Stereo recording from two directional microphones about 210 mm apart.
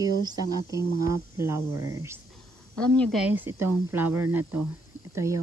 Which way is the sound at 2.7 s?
5° left (ahead or behind).